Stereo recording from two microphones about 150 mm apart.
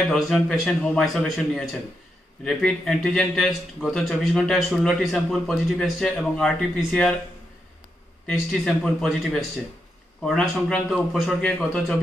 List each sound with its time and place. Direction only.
0.0 s a man's voice: centre (ahead or behind)
8.3 s a man's voice: 5° left (ahead or behind)